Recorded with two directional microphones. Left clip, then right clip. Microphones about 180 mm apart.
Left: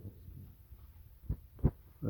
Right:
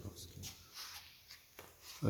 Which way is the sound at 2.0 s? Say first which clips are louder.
Right 3 dB; 25° right (ahead or behind).